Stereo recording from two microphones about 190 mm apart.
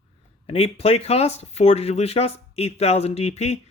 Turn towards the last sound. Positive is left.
turn(degrees=35)  # may be behind; listen again after turning